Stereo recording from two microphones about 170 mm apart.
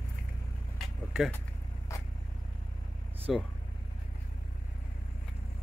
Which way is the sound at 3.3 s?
Centre (ahead or behind).